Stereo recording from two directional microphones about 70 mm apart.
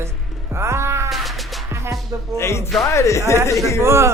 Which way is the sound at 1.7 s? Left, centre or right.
Right.